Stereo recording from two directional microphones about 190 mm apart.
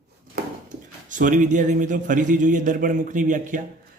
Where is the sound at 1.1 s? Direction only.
40° right (ahead or behind).